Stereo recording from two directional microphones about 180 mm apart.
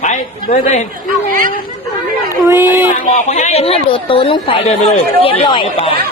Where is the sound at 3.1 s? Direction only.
40° left (ahead or behind).